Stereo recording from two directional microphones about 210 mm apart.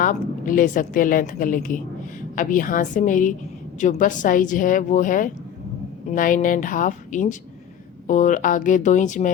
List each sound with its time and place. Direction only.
0.0 s a woman's voice: 40° left (ahead or behind)